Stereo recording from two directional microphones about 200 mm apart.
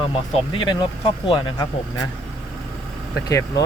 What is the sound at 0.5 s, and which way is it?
Speech, 20° left (ahead or behind).